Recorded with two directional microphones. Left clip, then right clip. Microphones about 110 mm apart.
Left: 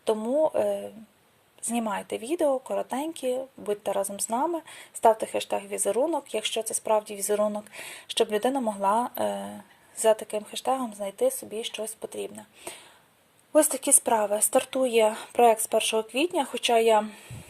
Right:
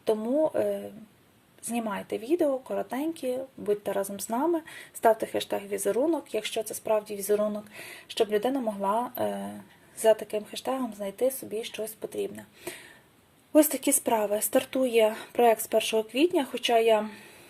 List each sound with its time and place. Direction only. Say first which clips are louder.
0.2 s a woman's voice: left 2 dB; 25° left (ahead or behind)